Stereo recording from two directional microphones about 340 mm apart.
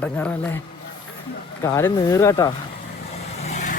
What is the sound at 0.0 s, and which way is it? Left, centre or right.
Speech, centre.